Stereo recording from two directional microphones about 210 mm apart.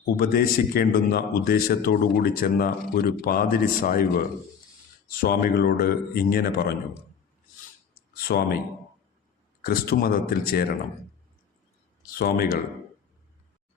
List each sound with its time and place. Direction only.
0.2 s a man's voice: 45° left (ahead or behind)
8.1 s speech: 45° left (ahead or behind)
9.6 s a man's voice: 45° left (ahead or behind)
12.1 s a man's voice: 45° left (ahead or behind)